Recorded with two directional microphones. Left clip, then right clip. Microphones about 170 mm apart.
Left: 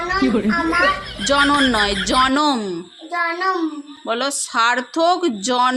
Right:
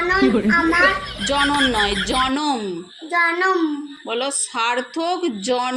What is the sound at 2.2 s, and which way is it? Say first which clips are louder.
Speech: left 4 dB; 35° left (ahead or behind).